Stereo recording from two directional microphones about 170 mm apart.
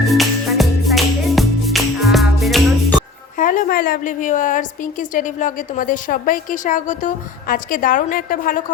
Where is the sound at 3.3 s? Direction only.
50° left (ahead or behind).